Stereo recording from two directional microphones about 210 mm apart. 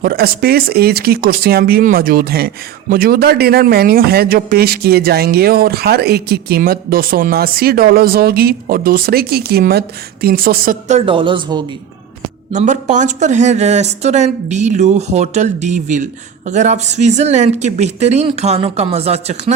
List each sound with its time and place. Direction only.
0.0 s a man's voice: 45° right (ahead or behind); by 11.6 s 20° right (ahead or behind)
12.5 s speech: 35° right (ahead or behind)